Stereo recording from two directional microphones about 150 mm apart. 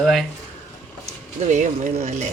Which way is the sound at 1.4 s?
55° right (ahead or behind).